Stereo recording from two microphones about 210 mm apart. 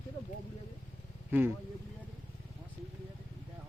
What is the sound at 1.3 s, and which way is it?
Speech, 10° right (ahead or behind).